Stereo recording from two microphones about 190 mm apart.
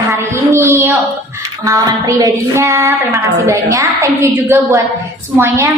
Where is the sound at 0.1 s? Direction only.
15° right (ahead or behind).